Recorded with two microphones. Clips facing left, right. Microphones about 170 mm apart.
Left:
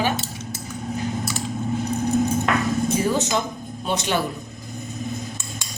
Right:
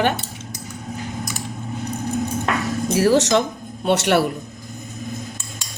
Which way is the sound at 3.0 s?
75° right (ahead or behind).